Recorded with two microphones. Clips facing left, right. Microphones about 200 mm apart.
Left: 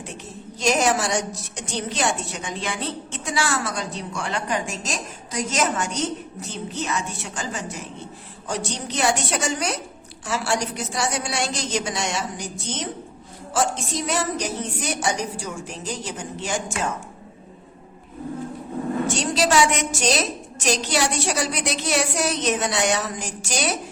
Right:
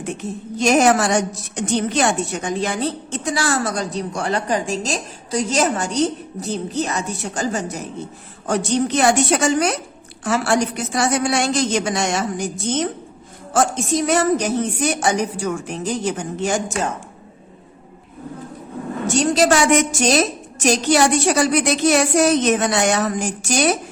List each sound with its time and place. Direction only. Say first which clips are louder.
0.6 s a woman's voice: right 6 dB; 55° right (ahead or behind)
8.4 s a woman's voice: right 10 dB; 55° right (ahead or behind)
19.0 s a sound: right 9 dB; 45° right (ahead or behind)